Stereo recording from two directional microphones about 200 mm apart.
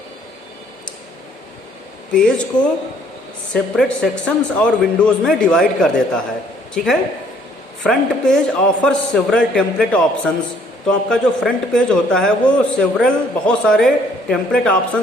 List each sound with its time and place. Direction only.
2.1 s a man's voice: 5° left (ahead or behind)